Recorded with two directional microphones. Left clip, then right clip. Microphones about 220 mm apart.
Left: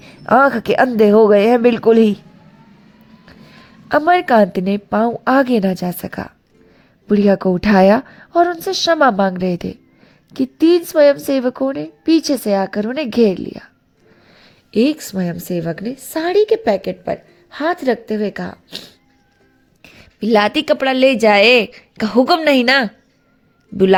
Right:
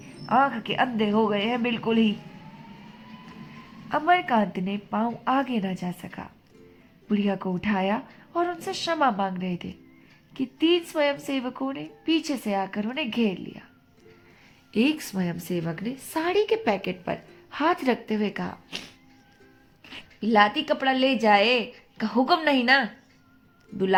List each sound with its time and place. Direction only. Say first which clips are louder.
0.0 s a woman's voice: left 10 dB; 50° left (ahead or behind)
3.8 s a woman's voice: left 9 dB; 45° left (ahead or behind)
14.4 s a woman's voice: left 9 dB; 35° left (ahead or behind)
19.8 s a woman's voice: left 8 dB; 40° left (ahead or behind)
23.7 s speech: left 13 dB; centre (ahead or behind)